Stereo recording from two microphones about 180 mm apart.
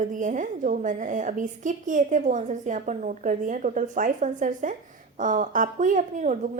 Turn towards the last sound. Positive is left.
turn(degrees=-45)  # may be behind; listen again after turning